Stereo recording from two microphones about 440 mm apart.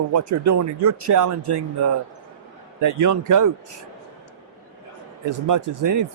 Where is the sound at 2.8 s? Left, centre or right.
Right.